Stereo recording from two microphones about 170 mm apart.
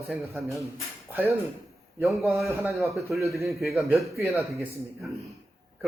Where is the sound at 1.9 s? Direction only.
Centre (ahead or behind).